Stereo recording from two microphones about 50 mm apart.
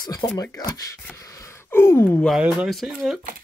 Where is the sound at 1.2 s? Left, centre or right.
Left.